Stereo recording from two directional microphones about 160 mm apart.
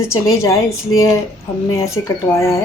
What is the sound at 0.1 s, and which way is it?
A woman's voice, 20° left (ahead or behind).